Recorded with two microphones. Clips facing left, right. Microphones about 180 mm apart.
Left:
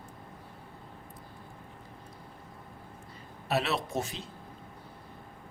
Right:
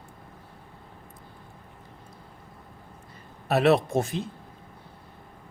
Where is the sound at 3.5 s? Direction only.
50° right (ahead or behind).